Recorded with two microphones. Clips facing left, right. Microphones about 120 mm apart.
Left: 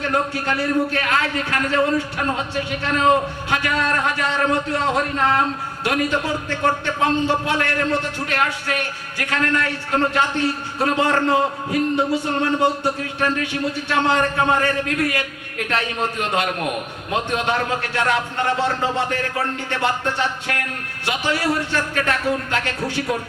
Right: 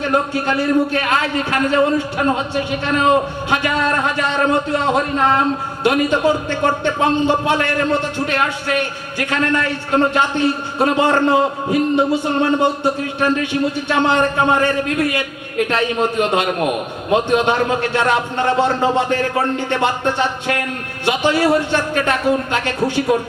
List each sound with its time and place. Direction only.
0.0 s a man's voice: 20° right (ahead or behind)